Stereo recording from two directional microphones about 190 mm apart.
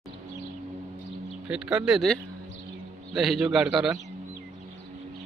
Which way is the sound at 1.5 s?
5° right (ahead or behind).